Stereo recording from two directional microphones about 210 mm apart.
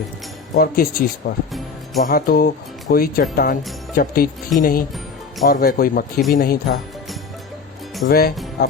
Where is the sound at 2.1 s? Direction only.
45° left (ahead or behind).